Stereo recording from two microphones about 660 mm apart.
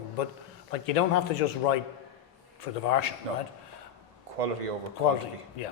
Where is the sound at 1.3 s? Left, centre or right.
Left.